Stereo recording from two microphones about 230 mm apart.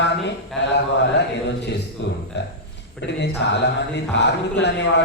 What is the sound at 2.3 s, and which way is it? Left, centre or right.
Speech, left.